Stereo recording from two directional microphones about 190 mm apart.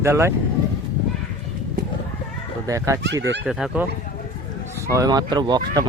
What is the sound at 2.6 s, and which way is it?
Speech, 15° right (ahead or behind).